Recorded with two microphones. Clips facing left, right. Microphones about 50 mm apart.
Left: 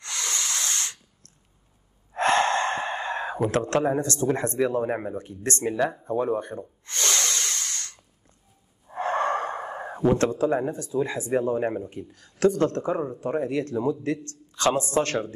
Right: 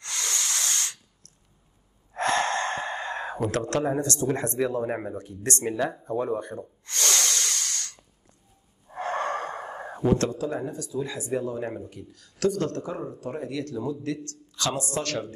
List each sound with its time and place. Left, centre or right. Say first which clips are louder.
0.0 s a sound: left 1 dB; left
2.1 s gasp: left 3 dB; left
3.5 s a man's voice: left 3 dB; left
4.6 s speech: left 2 dB; left
5.1 s speech: left 1 dB; left
6.9 s snort: even; left
8.9 s gasp: left 4 dB; left
10.1 s speech: left 4 dB; left